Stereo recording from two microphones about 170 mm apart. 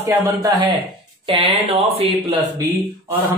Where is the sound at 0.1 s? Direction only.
20° right (ahead or behind).